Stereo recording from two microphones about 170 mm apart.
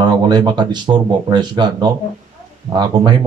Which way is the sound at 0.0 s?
25° right (ahead or behind).